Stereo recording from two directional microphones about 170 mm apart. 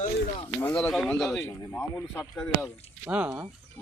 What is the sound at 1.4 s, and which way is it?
Speech, 15° left (ahead or behind).